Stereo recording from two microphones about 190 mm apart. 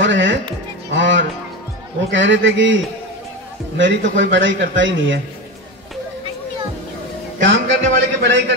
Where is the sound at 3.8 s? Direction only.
80° right.